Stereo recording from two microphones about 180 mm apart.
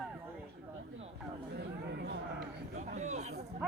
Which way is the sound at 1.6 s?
65° right (ahead or behind).